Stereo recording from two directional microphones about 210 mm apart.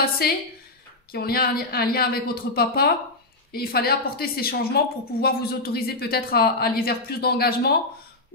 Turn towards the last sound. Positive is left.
turn(degrees=50)  # may be behind; listen again after turning